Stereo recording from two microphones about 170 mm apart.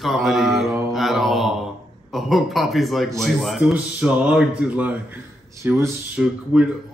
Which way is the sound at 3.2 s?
Centre (ahead or behind).